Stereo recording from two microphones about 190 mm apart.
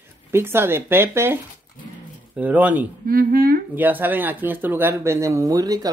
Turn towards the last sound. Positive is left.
turn(degrees=-20)  # may be behind; listen again after turning